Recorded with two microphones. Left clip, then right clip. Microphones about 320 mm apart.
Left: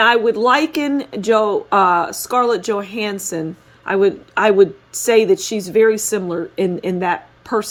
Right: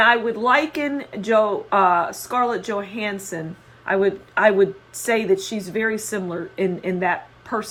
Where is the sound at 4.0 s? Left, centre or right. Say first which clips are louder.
Left 3 dB; left.